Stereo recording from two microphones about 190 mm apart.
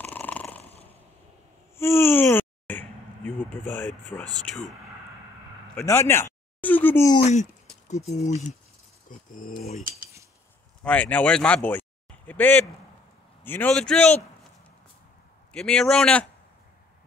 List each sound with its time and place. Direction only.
0.0 s purr: 10° left (ahead or behind)
1.8 s a sound: 15° left (ahead or behind)
4.1 s speech: 20° left (ahead or behind)
5.8 s speech: 15° left (ahead or behind)
7.9 s speech: 35° left (ahead or behind)
10.8 s a man's voice: 5° left (ahead or behind)
15.5 s a man's voice: 5° left (ahead or behind)